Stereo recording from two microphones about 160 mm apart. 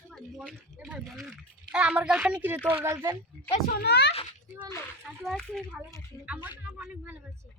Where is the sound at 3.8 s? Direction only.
90° left.